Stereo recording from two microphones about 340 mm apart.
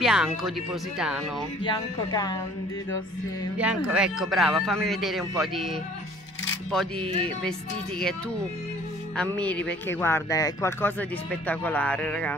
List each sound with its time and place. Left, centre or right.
0.0 s speech: centre
1.6 s speech: centre
3.5 s speech: centre
7.0 s speech: centre
9.1 s speech: centre